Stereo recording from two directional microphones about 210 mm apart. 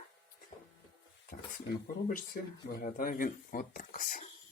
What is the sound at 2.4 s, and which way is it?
Speech, 45° left (ahead or behind).